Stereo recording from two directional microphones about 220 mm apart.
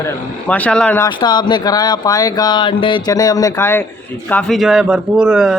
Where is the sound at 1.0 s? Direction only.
20° left (ahead or behind).